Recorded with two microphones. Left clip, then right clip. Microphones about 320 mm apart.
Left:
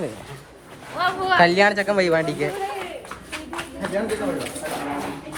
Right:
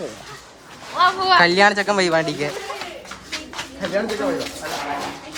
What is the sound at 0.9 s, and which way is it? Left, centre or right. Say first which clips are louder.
Speech: right 5 dB; right.